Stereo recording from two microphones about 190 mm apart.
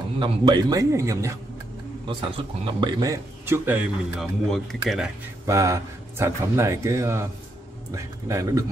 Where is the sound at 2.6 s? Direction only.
25° right (ahead or behind); by 5.0 s centre (ahead or behind).